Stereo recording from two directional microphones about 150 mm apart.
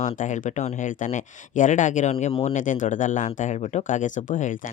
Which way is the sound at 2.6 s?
60° left (ahead or behind).